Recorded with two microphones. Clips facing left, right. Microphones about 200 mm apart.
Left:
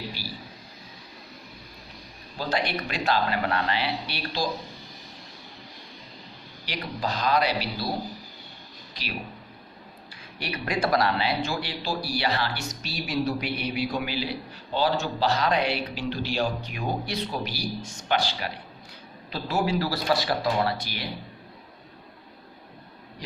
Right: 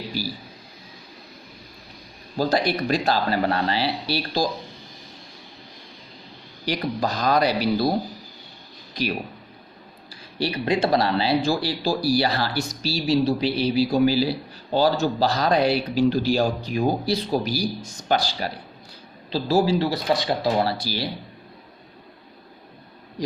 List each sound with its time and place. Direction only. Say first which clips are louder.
0.2 s a sound: right 10 dB; 40° right (ahead or behind)
2.4 s speech: right 6 dB; 40° right (ahead or behind)
6.7 s speech: right 6 dB; 45° right (ahead or behind)
10.3 s speech: right 7 dB; 30° right (ahead or behind)